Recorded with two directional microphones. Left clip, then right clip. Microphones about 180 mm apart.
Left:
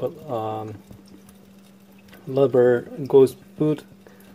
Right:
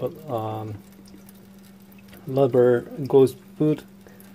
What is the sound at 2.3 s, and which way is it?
Speech, centre (ahead or behind).